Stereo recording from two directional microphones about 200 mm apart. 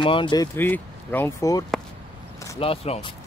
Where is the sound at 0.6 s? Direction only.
10° left (ahead or behind).